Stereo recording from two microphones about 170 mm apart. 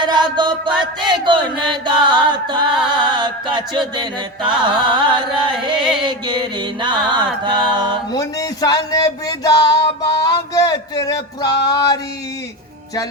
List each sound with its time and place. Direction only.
0.0 s mantra: 25° right (ahead or behind)
8.1 s music: 20° left (ahead or behind)
10.0 s a sound: 20° left (ahead or behind)